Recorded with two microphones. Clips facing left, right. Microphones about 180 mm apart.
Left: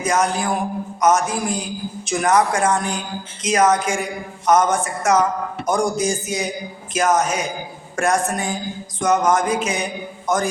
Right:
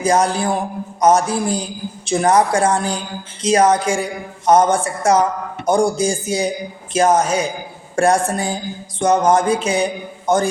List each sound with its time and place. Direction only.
0.0 s speech: 30° right (ahead or behind)